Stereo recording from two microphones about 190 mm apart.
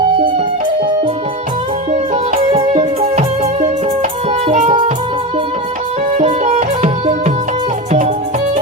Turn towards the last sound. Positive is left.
turn(degrees=-35)  # may be behind; listen again after turning